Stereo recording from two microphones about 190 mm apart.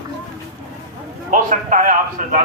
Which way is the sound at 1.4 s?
45° right (ahead or behind).